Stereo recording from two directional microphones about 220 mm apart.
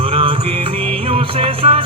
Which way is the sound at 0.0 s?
25° right (ahead or behind).